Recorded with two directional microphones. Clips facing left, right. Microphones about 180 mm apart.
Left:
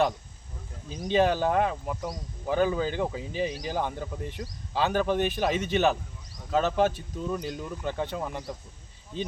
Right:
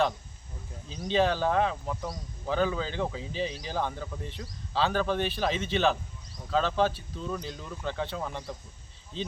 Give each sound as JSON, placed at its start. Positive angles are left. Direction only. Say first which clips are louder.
{"t": 1.1, "sound": "speech", "louder": "left 2 dB", "side_deg": 10}
{"t": 9.1, "sound": "speech", "louder": "left 2 dB", "side_deg": 50}